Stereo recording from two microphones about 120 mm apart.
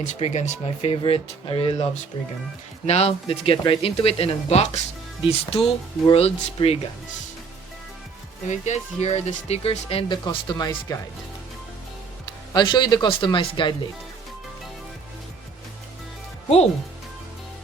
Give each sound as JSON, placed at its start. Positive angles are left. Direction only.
{"t": 0.0, "sound": "speech", "side_deg": 75}
{"t": 0.6, "sound": "speech", "side_deg": 55}
{"t": 5.2, "sound": "speech", "side_deg": 55}
{"t": 8.4, "sound": "speech", "side_deg": 75}
{"t": 10.2, "sound": "speech", "side_deg": 35}
{"t": 12.5, "sound": "speech", "side_deg": 40}